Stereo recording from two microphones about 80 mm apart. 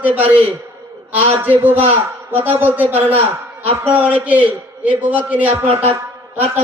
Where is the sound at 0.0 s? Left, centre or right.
Centre.